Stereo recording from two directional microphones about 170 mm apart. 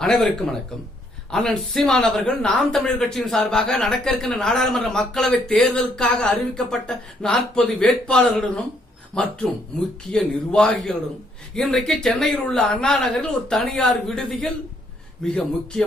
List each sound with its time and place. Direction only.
0.0 s speech: 5° left (ahead or behind)